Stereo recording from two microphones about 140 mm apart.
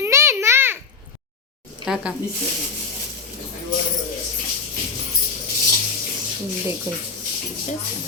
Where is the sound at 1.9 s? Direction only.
5° right (ahead or behind).